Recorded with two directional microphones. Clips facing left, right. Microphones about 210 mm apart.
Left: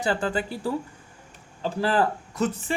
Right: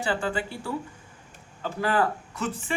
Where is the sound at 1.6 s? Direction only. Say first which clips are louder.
Left 2 dB; 35° left (ahead or behind).